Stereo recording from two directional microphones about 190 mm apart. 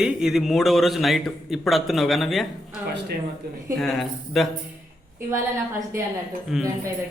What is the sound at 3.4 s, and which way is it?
Speech, 60° right (ahead or behind).